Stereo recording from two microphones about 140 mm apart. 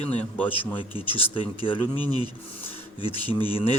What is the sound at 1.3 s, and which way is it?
Speech, 40° left (ahead or behind).